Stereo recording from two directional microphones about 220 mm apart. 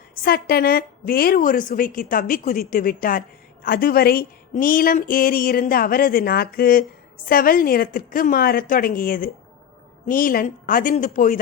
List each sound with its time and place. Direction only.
0.2 s a woman's voice: 45° left (ahead or behind)